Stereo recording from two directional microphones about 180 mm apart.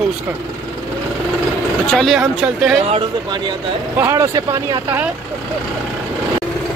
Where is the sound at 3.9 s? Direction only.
15° right (ahead or behind).